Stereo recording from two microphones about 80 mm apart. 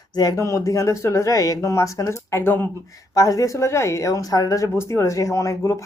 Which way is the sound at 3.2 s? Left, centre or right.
Left.